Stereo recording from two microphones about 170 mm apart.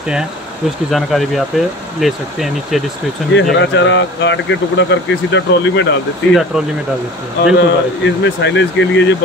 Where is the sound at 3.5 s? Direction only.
90° left.